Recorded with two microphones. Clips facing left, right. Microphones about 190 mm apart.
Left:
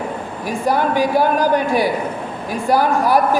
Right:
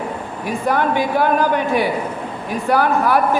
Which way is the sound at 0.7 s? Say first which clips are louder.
Left 2 dB; 35° left (ahead or behind).